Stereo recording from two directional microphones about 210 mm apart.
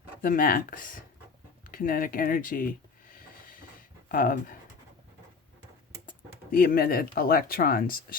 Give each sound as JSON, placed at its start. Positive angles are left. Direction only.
{"t": 0.2, "sound": "speech", "side_deg": 40}
{"t": 1.6, "sound": "a sound", "side_deg": 40}
{"t": 6.1, "sound": "speech", "side_deg": 40}